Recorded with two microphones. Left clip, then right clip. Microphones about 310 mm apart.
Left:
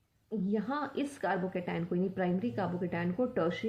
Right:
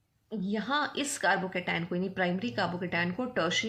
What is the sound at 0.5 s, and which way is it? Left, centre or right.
Speech, centre.